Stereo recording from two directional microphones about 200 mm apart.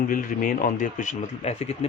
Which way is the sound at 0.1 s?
45° left (ahead or behind).